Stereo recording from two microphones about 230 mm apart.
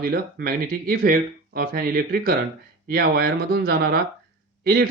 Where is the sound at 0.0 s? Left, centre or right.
Right.